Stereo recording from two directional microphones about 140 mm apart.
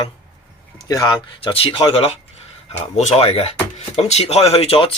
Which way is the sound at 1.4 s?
35° left (ahead or behind).